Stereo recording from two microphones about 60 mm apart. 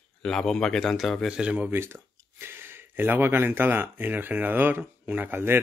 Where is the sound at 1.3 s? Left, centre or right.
Centre.